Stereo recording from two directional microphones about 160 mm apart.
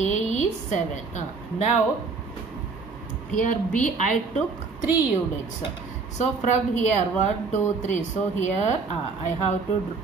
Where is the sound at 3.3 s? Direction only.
55° left (ahead or behind).